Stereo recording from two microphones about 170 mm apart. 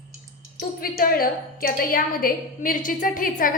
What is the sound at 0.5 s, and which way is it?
A woman's voice, 60° left (ahead or behind).